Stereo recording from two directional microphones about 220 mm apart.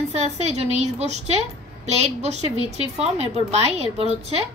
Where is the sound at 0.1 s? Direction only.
30° right (ahead or behind).